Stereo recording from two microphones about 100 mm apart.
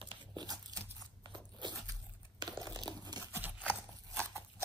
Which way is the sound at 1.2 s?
50° right (ahead or behind).